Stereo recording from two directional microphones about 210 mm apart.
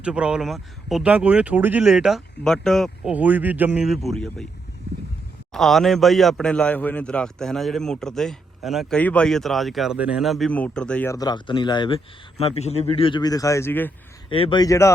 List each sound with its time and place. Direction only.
0.0 s a man's voice: 5° right (ahead or behind)
5.5 s a man's voice: centre (ahead or behind)
14.3 s speech: 25° left (ahead or behind)